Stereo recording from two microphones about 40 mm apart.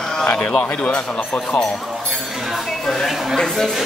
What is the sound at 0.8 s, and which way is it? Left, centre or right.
Speech, left.